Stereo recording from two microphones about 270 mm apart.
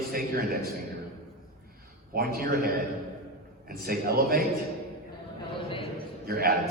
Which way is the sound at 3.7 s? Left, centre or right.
Right.